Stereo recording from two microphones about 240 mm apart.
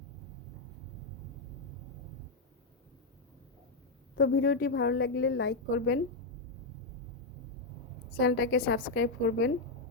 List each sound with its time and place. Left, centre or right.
4.1 s a woman's voice: left
8.2 s a woman's voice: left
8.8 s a woman's voice: left